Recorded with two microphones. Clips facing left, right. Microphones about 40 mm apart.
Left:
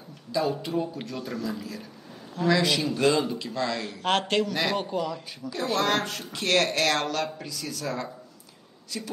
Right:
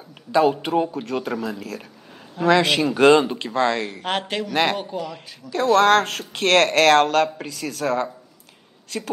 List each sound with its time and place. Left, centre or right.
0.3 s speech: right
4.0 s speech: centre
5.5 s speech: right